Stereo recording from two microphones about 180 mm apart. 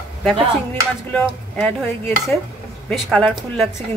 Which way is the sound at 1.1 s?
5° left (ahead or behind).